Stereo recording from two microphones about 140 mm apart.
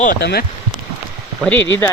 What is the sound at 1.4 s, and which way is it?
Speech, 15° left (ahead or behind).